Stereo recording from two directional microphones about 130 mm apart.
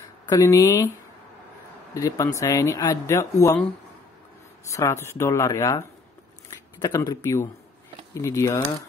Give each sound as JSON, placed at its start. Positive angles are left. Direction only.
{"t": 0.3, "sound": "speech", "side_deg": 25}
{"t": 2.0, "sound": "speech", "side_deg": 25}
{"t": 4.7, "sound": "speech", "side_deg": 20}